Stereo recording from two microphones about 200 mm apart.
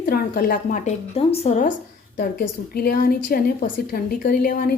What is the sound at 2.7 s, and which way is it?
A woman's voice, 45° left (ahead or behind).